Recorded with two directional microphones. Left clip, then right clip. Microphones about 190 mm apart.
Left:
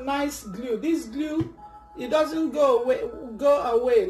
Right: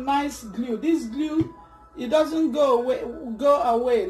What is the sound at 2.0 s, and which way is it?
Speech, 20° right (ahead or behind).